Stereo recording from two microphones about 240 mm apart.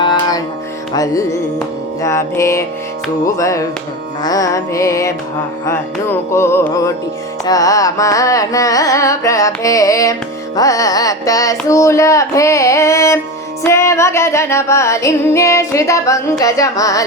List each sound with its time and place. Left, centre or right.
0.0 s music: centre
0.9 s carnatic music: centre